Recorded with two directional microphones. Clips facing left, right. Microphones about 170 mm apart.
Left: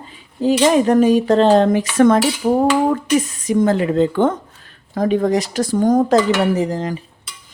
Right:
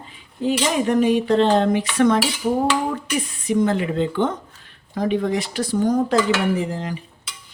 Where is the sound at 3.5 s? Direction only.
40° left (ahead or behind).